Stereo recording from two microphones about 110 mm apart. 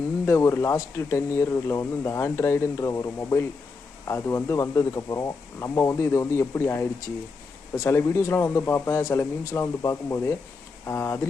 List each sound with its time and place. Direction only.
0.3 s speech: 25° left (ahead or behind)